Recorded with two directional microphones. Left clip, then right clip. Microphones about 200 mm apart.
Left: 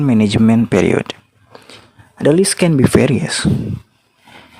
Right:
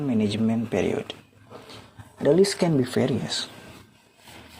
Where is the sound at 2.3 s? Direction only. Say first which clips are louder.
Left 6 dB; 65° left (ahead or behind).